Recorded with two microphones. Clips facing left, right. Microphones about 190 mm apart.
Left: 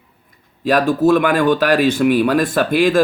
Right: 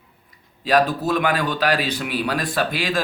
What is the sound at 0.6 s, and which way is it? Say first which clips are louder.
Speech: left 5 dB; 50° left (ahead or behind).